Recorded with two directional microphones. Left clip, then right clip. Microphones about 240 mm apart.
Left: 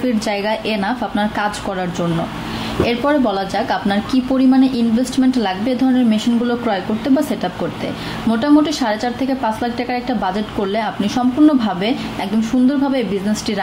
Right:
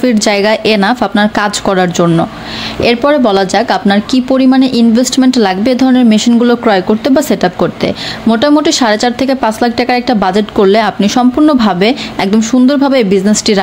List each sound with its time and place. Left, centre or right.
0.0 s a woman's voice: right